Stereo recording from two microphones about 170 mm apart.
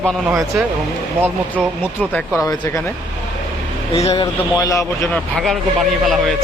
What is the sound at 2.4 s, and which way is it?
Speech, 15° left (ahead or behind).